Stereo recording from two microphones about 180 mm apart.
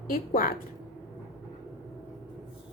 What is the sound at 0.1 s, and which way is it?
Speech, 50° left (ahead or behind).